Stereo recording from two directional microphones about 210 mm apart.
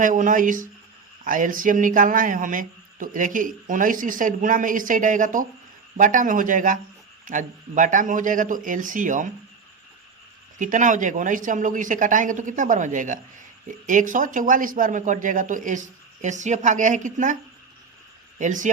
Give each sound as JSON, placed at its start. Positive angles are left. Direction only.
{"t": 0.0, "sound": "speech", "side_deg": -35}
{"t": 10.6, "sound": "speech", "side_deg": -35}
{"t": 18.3, "sound": "speech", "side_deg": -35}